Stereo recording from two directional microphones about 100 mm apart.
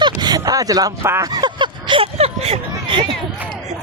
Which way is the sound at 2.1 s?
85° right.